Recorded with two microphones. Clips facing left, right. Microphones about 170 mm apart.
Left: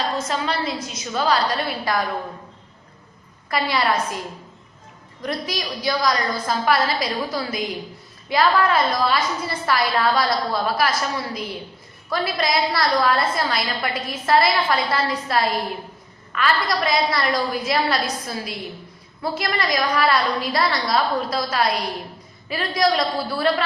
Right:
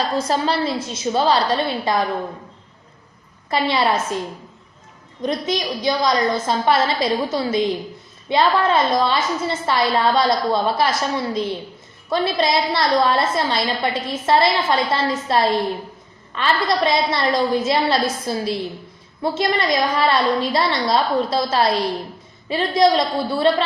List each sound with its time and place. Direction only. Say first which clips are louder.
0.2 s a woman's voice: right 5 dB; 30° right (ahead or behind)
3.5 s a woman's voice: right 3 dB; 25° right (ahead or behind)
5.2 s a woman's voice: right 5 dB; 20° right (ahead or behind)